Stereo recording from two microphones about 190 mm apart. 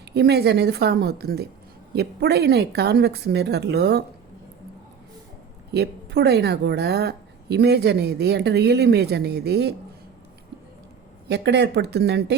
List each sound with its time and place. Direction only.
0.0 s a woman's voice: 60° right (ahead or behind)
5.7 s a woman's voice: 60° right (ahead or behind)
11.3 s a woman's voice: 65° right (ahead or behind)